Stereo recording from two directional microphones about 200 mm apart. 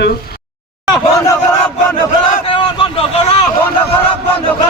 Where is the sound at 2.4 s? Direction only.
25° left (ahead or behind).